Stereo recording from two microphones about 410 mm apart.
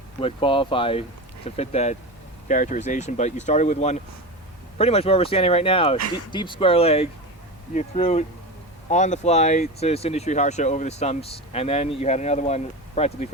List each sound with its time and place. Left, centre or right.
0.2 s speech: centre